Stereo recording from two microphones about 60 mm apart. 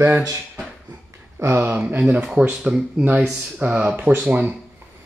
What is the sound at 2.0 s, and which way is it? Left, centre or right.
Speech, centre.